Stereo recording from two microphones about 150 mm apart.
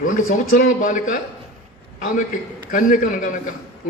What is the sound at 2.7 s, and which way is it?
Speech, 65° left (ahead or behind).